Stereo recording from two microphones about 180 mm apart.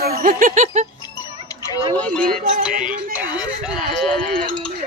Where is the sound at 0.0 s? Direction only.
55° right (ahead or behind).